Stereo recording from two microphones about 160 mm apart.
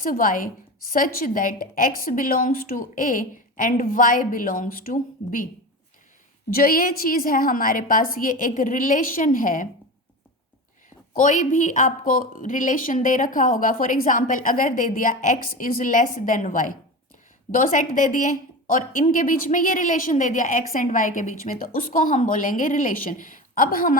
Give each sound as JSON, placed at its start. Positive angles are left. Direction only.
{"t": 0.0, "sound": "speech", "side_deg": 60}
{"t": 6.5, "sound": "speech", "side_deg": 65}
{"t": 11.1, "sound": "speech", "side_deg": 55}